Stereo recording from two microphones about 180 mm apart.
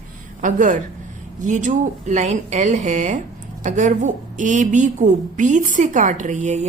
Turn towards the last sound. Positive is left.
turn(degrees=-40)  # may be behind; listen again after turning